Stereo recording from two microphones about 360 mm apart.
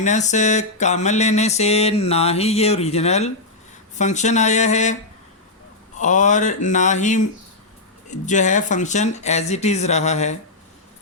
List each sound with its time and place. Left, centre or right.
0.0 s mantra: centre
3.9 s speech: centre
6.0 s speech: centre